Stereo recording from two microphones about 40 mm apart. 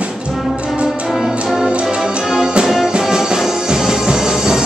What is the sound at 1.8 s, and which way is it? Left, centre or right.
Music, right.